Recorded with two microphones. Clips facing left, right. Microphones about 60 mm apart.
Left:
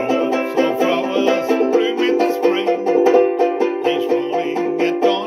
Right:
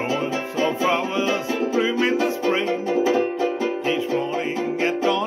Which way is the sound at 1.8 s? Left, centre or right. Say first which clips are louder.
Left 4 dB; right.